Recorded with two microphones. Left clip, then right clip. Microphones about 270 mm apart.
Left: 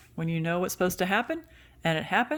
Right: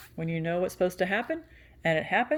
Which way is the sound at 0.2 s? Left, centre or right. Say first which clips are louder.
Even; left.